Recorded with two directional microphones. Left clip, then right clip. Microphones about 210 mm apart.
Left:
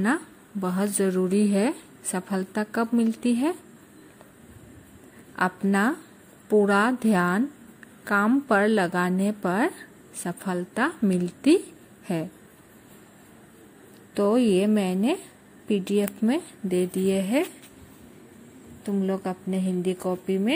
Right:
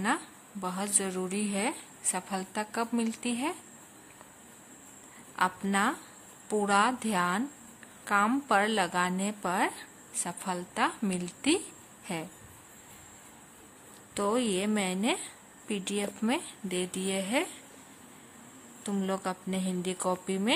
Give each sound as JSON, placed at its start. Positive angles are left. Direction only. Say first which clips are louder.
{"t": 0.0, "sound": "a woman's voice", "louder": "left 4 dB", "side_deg": 20}
{"t": 5.7, "sound": "a woman's voice", "louder": "left 4 dB", "side_deg": 15}
{"t": 14.1, "sound": "a woman's voice", "louder": "left 8 dB", "side_deg": 10}
{"t": 18.9, "sound": "a woman's voice", "louder": "left 4 dB", "side_deg": 0}